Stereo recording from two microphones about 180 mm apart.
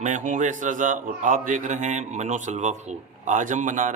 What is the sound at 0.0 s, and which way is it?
A man's voice, 45° right (ahead or behind).